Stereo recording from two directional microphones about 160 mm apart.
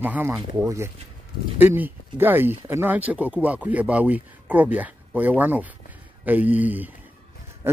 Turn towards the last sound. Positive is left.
turn(degrees=-10)  # may be behind; listen again after turning